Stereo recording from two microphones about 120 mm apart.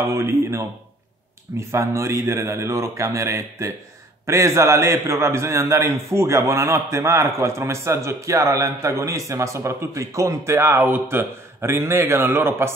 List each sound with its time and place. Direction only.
0.0 s a man's voice: 25° right (ahead or behind)